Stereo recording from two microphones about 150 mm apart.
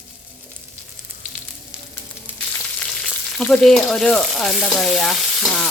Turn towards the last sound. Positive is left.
turn(degrees=0)  # may be behind; listen again after turning